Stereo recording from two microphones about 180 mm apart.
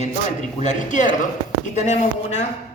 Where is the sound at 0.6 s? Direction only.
45° left (ahead or behind).